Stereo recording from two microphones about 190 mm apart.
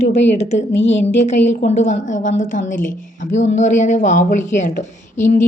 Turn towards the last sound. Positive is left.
turn(degrees=40)  # may be behind; listen again after turning